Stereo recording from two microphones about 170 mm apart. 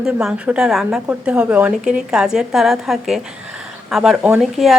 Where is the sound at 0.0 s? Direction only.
5° right (ahead or behind).